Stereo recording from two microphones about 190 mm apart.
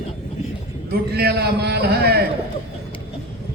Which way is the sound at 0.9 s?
60° right (ahead or behind).